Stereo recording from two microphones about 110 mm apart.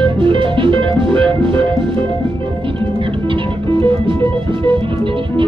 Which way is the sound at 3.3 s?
50° right (ahead or behind).